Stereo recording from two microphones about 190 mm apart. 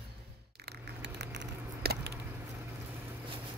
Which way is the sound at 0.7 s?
60° right (ahead or behind).